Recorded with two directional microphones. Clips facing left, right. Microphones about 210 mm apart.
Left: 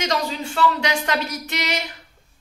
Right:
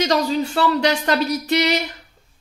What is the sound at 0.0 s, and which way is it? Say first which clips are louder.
Speech: right 6 dB; 40° right (ahead or behind).